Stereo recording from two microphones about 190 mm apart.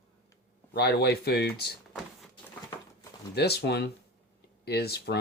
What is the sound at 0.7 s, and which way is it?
Speech, 60° left (ahead or behind).